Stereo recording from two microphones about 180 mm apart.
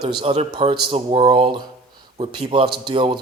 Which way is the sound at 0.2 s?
30° right (ahead or behind).